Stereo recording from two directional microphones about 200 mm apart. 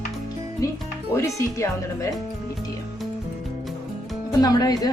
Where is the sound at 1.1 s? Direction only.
15° left (ahead or behind).